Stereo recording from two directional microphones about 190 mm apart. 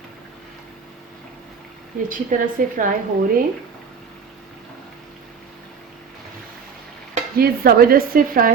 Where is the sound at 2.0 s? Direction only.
45° right (ahead or behind).